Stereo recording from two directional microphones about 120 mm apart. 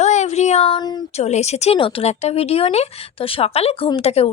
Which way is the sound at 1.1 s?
70° left (ahead or behind).